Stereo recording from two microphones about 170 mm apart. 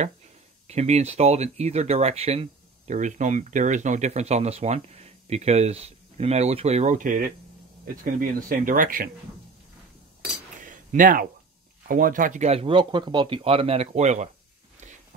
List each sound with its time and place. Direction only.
0.7 s speech: 40° right (ahead or behind)
10.6 s a sound: 50° right (ahead or behind)
11.9 s speech: 55° right (ahead or behind)